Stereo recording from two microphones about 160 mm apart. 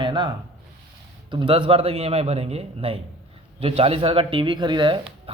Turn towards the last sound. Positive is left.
turn(degrees=-30)  # may be behind; listen again after turning